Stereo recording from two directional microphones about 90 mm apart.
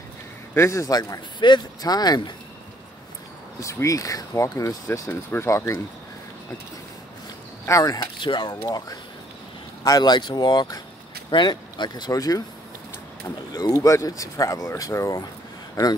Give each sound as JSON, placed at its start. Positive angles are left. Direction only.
{"t": 0.6, "sound": "speech", "side_deg": 35}
{"t": 1.4, "sound": "speech", "side_deg": 50}
{"t": 3.5, "sound": "speech", "side_deg": 35}
{"t": 7.6, "sound": "speech", "side_deg": 35}
{"t": 8.2, "sound": "speech", "side_deg": 55}
{"t": 13.5, "sound": "speech", "side_deg": 45}